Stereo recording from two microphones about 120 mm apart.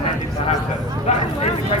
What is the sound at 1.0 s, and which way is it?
Speech, 60° left (ahead or behind).